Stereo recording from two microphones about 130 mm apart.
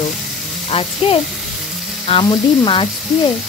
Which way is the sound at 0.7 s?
45° left (ahead or behind).